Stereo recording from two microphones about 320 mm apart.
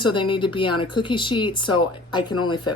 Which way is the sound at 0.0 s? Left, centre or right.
Centre.